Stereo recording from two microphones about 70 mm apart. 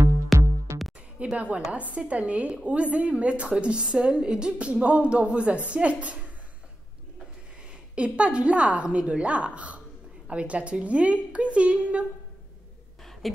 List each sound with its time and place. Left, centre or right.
0.3 s music: centre
1.2 s a woman's voice: centre
7.9 s a woman's voice: centre
13.0 s a sound: centre